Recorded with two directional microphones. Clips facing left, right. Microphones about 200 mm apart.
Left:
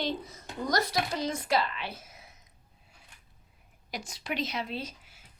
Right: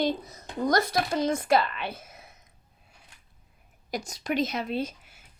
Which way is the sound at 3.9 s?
45° right (ahead or behind).